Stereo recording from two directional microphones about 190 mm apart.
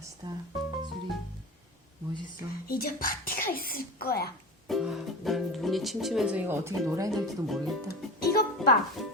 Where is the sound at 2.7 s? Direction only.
50° left (ahead or behind).